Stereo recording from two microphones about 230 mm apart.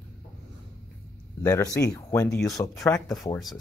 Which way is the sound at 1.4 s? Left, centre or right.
Centre.